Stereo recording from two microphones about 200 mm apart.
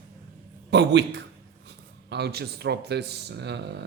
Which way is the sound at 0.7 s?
60° right (ahead or behind).